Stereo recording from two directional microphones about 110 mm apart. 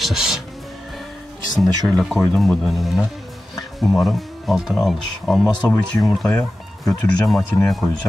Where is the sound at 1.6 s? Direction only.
Centre (ahead or behind).